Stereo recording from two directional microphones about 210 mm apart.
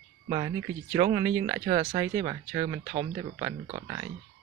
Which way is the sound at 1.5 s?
25° right (ahead or behind).